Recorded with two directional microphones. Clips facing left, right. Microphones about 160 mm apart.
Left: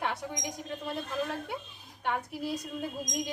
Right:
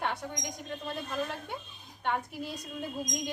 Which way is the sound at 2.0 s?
5° left (ahead or behind).